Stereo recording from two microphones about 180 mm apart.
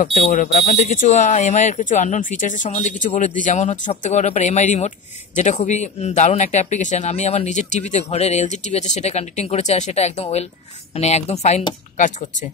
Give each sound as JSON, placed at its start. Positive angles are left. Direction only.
{"t": 0.0, "sound": "speech", "side_deg": 40}